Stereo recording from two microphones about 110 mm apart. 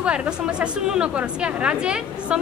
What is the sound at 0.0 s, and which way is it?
A woman's voice, 10° right (ahead or behind).